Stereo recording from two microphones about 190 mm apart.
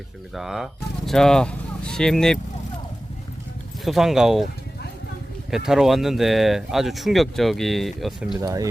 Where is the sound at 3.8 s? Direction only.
Centre (ahead or behind).